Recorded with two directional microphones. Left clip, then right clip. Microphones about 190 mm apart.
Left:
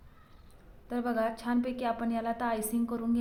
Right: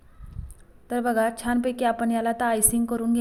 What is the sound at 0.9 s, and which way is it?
A woman's voice, 35° right (ahead or behind).